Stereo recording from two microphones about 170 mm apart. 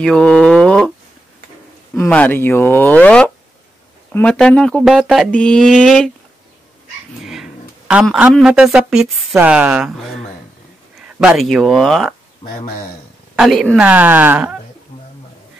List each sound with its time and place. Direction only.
0.0 s a sound: 5° left (ahead or behind)
2.0 s speech: 10° left (ahead or behind)
7.2 s a woman's voice: 5° right (ahead or behind)
12.4 s speech: 25° left (ahead or behind)
13.4 s speech: centre (ahead or behind)
13.7 s speech: 10° right (ahead or behind)